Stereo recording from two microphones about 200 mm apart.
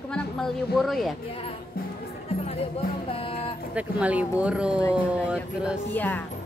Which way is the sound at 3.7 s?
5° right (ahead or behind).